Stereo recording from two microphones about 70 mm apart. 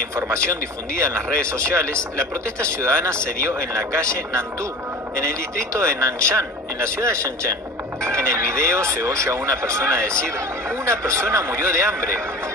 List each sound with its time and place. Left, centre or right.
0.1 s speech: right
5.6 s speech: right